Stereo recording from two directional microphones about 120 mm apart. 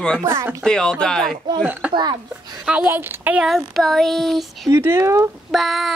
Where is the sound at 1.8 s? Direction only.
10° right (ahead or behind).